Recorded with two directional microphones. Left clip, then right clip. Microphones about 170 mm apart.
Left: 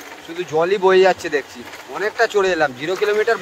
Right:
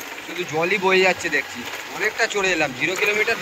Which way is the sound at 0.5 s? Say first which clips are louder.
Left 4 dB; 55° left (ahead or behind).